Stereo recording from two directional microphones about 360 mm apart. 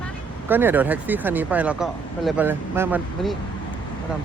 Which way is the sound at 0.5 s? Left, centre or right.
Centre.